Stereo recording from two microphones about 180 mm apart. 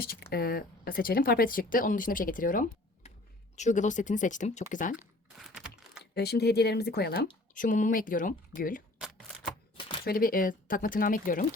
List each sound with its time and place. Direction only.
0.0 s speech: 60° left (ahead or behind)
6.1 s speech: 65° left (ahead or behind)
9.0 s shuffling cards: centre (ahead or behind)
10.0 s speech: 55° left (ahead or behind)